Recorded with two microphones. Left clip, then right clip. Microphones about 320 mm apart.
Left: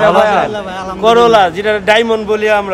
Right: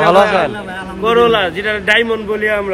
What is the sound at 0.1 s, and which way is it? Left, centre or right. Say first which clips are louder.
Speech: left 1 dB; centre.